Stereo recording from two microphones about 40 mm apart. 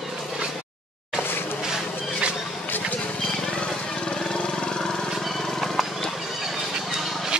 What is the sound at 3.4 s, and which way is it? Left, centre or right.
Vehicle, left.